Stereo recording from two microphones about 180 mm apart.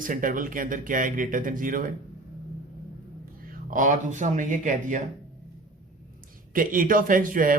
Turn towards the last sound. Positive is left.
turn(degrees=-50)  # may be behind; listen again after turning